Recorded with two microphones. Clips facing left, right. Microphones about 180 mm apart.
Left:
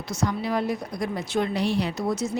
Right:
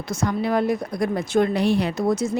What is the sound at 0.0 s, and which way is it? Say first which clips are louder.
A woman's voice: right 3 dB; 50° right (ahead or behind).